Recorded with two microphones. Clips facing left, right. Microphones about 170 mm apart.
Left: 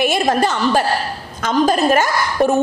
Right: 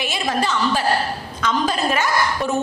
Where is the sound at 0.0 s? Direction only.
50° left (ahead or behind).